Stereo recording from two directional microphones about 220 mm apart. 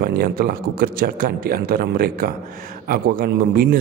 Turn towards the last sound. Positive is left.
turn(degrees=-40)  # may be behind; listen again after turning